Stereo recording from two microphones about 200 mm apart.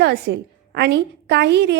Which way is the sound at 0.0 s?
55° right (ahead or behind).